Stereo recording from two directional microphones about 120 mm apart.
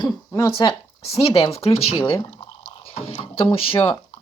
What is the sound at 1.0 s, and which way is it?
Speech, 55° left (ahead or behind).